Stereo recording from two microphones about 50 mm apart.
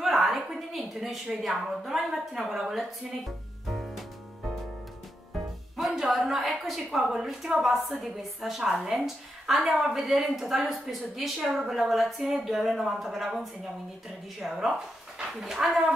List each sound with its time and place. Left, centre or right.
0.0 s a woman's voice: centre
5.8 s a woman's voice: centre